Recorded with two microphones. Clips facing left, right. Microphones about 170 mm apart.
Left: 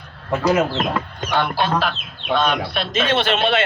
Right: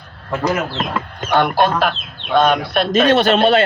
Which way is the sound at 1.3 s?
50° right (ahead or behind).